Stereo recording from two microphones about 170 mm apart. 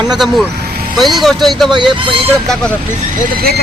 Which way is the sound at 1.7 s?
30° right (ahead or behind).